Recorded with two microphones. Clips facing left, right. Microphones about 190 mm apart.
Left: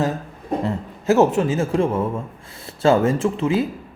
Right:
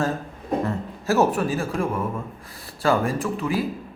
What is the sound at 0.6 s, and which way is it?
A man's voice, 20° left (ahead or behind).